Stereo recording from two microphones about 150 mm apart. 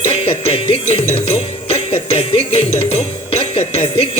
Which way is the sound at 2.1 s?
45° left (ahead or behind).